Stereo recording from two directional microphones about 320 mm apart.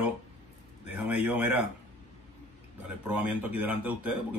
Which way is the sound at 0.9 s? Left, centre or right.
Centre.